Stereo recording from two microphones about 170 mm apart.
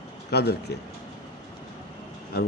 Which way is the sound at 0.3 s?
70° left (ahead or behind).